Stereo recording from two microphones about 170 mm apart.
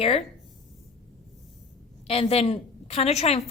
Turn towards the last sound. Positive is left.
turn(degrees=40)  # may be behind; listen again after turning